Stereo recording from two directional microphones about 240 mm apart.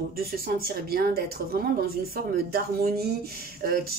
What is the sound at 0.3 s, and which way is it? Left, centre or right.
Speech, right.